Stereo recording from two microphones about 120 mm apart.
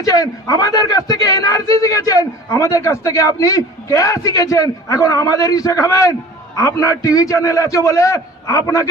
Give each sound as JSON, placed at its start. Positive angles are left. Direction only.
{"t": 0.0, "sound": "speech", "side_deg": 30}